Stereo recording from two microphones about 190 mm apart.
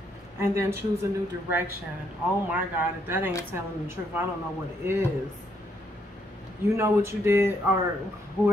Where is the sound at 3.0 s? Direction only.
10° right (ahead or behind).